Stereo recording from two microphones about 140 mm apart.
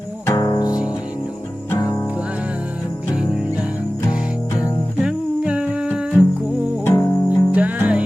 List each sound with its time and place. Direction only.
0.3 s music: 30° left (ahead or behind)
5.0 s humming: 10° right (ahead or behind)
6.8 s music: 25° left (ahead or behind)
7.5 s music: 10° right (ahead or behind)